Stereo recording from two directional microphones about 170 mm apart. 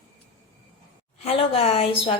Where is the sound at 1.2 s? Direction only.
35° left (ahead or behind).